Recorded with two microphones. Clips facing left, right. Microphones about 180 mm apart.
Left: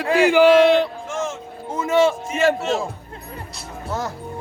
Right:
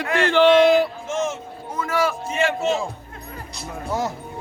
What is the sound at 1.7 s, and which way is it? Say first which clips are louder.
Music: left 6 dB; 25° left (ahead or behind).